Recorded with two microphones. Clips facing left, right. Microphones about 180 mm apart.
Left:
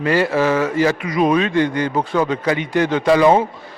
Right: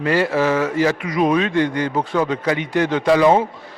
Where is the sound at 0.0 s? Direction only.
10° left (ahead or behind).